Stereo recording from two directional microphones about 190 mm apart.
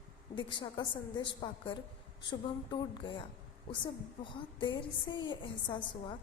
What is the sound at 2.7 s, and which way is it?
A woman's voice, 25° left (ahead or behind).